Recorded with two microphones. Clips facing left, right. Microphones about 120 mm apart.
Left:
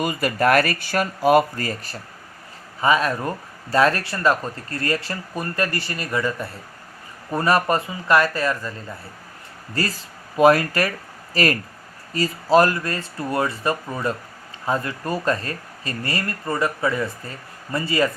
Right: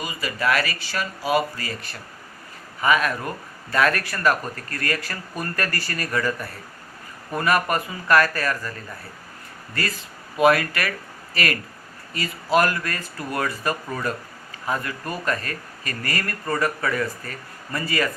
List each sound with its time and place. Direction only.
0.0 s speech: 55° left (ahead or behind)
2.8 s speech: 30° left (ahead or behind)
9.7 s speech: 35° left (ahead or behind)